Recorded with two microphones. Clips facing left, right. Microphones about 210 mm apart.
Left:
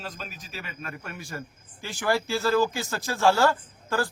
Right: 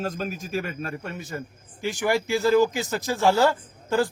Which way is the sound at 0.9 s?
25° right (ahead or behind).